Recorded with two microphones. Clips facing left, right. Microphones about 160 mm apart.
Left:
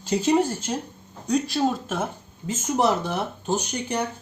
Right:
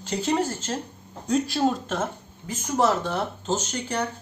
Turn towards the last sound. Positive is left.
turn(degrees=15)  # may be behind; listen again after turning